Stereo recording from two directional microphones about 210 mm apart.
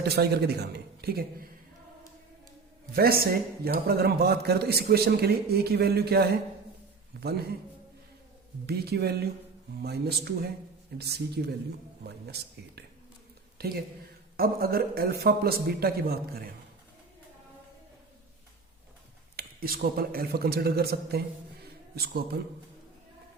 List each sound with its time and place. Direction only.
0.0 s a man's voice: 50° right (ahead or behind)
2.9 s a man's voice: 45° right (ahead or behind)
8.6 s a man's voice: 50° right (ahead or behind)
19.4 s a man's voice: 45° right (ahead or behind)